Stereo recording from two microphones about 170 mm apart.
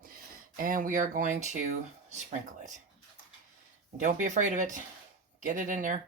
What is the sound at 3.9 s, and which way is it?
Speech, 50° right (ahead or behind).